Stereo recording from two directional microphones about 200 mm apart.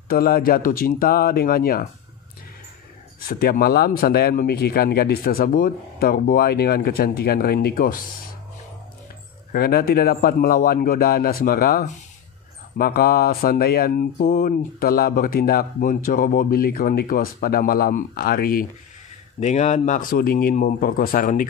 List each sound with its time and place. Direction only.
0.1 s speech: 50° left (ahead or behind)
3.3 s speech: 50° left (ahead or behind)
9.5 s speech: 50° left (ahead or behind)
19.4 s speech: 35° left (ahead or behind)